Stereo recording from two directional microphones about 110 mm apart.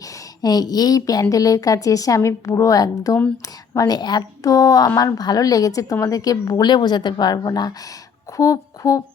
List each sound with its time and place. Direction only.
0.4 s a woman's voice: 35° left (ahead or behind)